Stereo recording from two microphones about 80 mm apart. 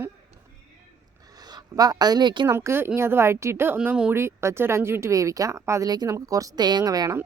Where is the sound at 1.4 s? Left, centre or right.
Right.